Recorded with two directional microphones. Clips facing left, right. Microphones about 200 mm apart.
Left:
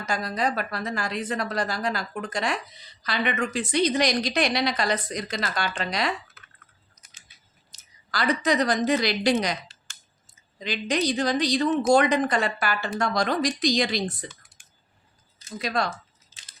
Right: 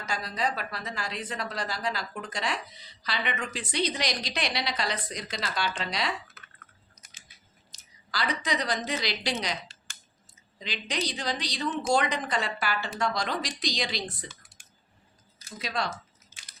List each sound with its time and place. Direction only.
0.0 s a woman's voice: 45° left (ahead or behind)
8.1 s a woman's voice: 50° left (ahead or behind)
10.6 s a woman's voice: 50° left (ahead or behind)
15.6 s a woman's voice: 50° left (ahead or behind)